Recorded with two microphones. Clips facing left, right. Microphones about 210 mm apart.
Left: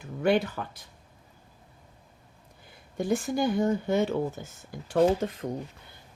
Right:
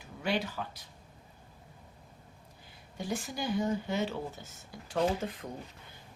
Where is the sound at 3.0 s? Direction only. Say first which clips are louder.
Left 9 dB; 50° left (ahead or behind).